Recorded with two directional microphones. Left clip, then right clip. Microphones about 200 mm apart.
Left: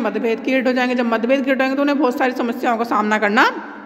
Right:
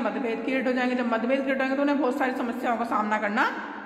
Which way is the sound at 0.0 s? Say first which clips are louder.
Left 8 dB; 50° left (ahead or behind).